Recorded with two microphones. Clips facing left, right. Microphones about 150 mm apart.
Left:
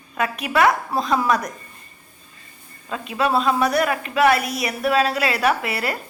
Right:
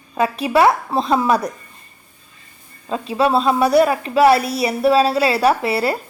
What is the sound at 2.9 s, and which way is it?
A woman's voice, 30° right (ahead or behind).